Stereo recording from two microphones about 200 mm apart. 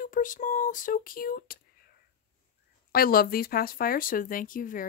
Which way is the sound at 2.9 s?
50° left (ahead or behind).